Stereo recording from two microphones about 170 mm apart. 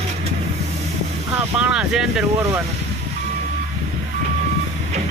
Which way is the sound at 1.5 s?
5° right (ahead or behind).